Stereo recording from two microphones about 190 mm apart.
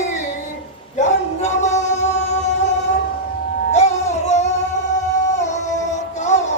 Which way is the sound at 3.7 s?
35° left (ahead or behind).